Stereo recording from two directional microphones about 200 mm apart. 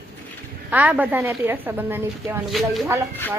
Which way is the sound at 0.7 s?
10° right (ahead or behind).